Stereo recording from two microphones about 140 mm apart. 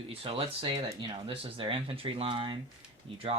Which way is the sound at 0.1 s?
45° right (ahead or behind).